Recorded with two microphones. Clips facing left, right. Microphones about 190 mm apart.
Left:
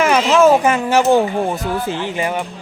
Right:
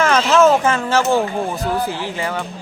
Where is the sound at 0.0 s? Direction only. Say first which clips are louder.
Left 1 dB; 15° left (ahead or behind).